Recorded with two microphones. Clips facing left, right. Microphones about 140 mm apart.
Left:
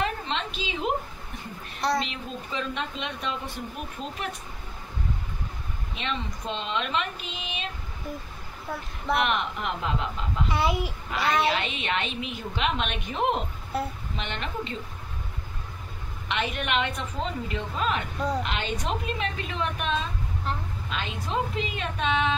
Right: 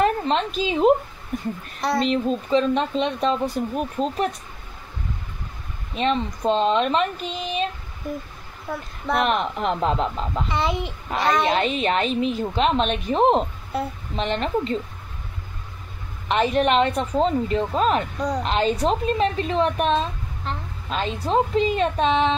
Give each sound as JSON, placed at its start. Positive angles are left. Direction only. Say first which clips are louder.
{"t": 0.0, "sound": "a woman's voice", "louder": "right 9 dB", "side_deg": -40}
{"t": 1.8, "sound": "a woman's voice", "louder": "right 3 dB", "side_deg": 0}
{"t": 2.0, "sound": "speech", "louder": "right 14 dB", "side_deg": -35}
{"t": 5.9, "sound": "speech", "louder": "right 10 dB", "side_deg": -40}
{"t": 9.1, "sound": "speech", "louder": "right 4 dB", "side_deg": -35}
{"t": 10.5, "sound": "a child's voice", "louder": "right 1 dB", "side_deg": 5}
{"t": 11.1, "sound": "a child's voice", "louder": "right 4 dB", "side_deg": -40}
{"t": 13.7, "sound": "a woman's voice", "louder": "right 3 dB", "side_deg": 0}
{"t": 14.1, "sound": "speech", "louder": "right 12 dB", "side_deg": -35}
{"t": 16.3, "sound": "speech", "louder": "right 10 dB", "side_deg": -35}